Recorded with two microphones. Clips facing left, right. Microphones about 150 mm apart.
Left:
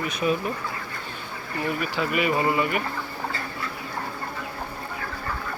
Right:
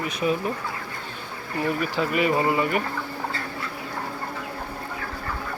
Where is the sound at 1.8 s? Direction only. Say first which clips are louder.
Right 1 dB; 35° right (ahead or behind).